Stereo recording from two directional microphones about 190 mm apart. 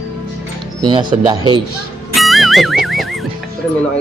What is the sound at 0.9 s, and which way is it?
Speech, 25° right (ahead or behind).